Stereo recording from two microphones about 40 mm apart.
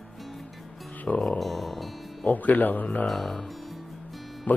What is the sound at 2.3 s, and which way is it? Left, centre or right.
Speech, left.